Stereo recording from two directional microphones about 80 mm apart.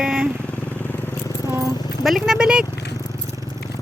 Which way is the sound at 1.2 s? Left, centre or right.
Left.